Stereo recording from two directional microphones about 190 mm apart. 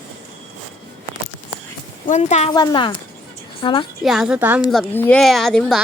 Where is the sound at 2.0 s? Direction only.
40° left (ahead or behind).